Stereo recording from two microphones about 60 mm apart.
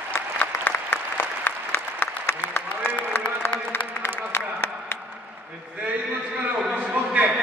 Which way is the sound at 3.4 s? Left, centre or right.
Left.